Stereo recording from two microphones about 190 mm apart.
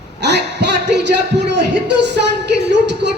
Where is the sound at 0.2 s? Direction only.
65° right (ahead or behind).